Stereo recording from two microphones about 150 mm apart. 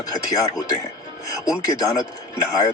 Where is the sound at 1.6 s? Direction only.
25° left (ahead or behind).